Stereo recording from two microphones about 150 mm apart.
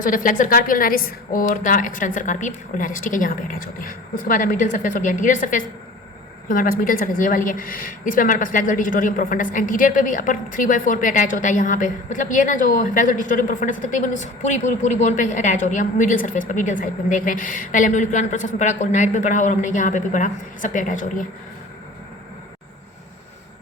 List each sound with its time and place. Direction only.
0.0 s a woman's voice: 60° left (ahead or behind)